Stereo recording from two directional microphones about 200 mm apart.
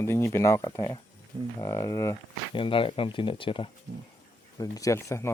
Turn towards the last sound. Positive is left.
turn(degrees=15)  # may be behind; listen again after turning